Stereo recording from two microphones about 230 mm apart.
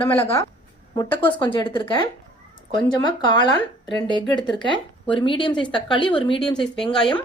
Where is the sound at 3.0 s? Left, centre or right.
Centre.